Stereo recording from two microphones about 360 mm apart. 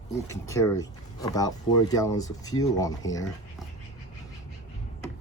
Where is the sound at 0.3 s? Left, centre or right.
Centre.